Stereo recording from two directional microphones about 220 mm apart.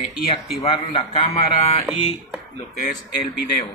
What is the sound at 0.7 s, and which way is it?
Speech, 20° left (ahead or behind).